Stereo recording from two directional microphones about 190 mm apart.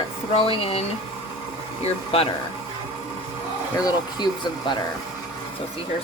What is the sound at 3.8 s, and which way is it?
Speech, 20° left (ahead or behind).